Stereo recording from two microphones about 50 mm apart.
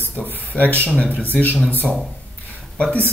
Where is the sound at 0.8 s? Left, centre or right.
Left.